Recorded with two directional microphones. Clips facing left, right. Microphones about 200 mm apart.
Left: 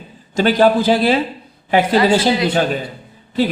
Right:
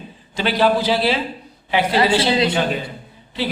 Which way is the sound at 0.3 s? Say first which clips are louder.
Left 5 dB; 45° left (ahead or behind).